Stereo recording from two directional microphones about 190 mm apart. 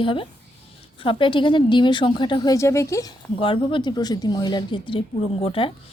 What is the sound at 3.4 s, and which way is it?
A woman's voice, 25° left (ahead or behind).